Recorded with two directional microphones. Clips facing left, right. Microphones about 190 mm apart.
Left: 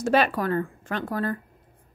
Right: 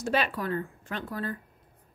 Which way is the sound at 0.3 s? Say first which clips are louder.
Left 6 dB; 85° left.